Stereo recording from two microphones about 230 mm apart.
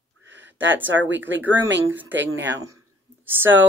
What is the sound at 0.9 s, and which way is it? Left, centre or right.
Speech, right.